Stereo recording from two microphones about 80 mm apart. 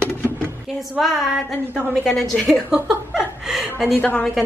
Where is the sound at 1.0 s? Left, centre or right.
Centre.